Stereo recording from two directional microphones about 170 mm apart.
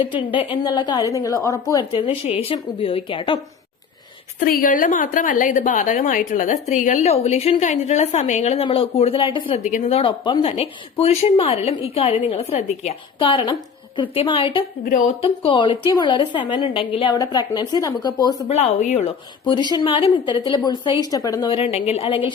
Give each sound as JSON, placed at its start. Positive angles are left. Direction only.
{"t": 0.6, "sound": "a woman's voice", "side_deg": 25}
{"t": 4.4, "sound": "a woman's voice", "side_deg": 55}
{"t": 9.6, "sound": "a woman's voice", "side_deg": 45}
{"t": 10.0, "sound": "a woman's voice", "side_deg": 25}
{"t": 11.0, "sound": "a woman's voice", "side_deg": 35}
{"t": 14.8, "sound": "speech", "side_deg": 55}
{"t": 15.2, "sound": "a woman's voice", "side_deg": 30}
{"t": 18.4, "sound": "a woman's voice", "side_deg": 40}
{"t": 19.5, "sound": "a woman's voice", "side_deg": 25}
{"t": 21.5, "sound": "a woman's voice", "side_deg": 35}